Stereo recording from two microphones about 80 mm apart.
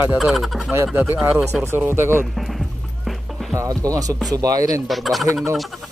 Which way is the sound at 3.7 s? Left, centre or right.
Right.